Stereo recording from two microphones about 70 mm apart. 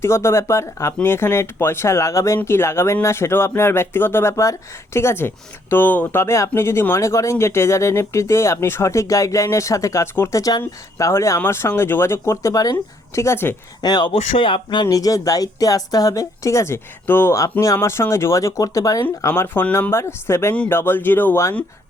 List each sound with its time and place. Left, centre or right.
0.0 s speech: left
6.2 s speech: left
10.9 s speech: left
11.3 s speech: left
13.1 s speech: left
13.8 s speech: left
14.8 s speech: left
19.3 s speech: left
19.9 s speech: left